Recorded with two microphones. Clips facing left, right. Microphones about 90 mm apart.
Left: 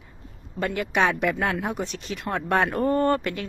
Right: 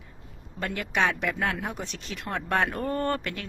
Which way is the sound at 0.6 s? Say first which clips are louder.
Left 4 dB; 10° left (ahead or behind).